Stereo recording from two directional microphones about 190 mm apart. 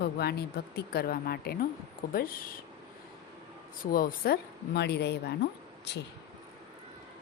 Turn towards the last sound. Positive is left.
turn(degrees=60)  # may be behind; listen again after turning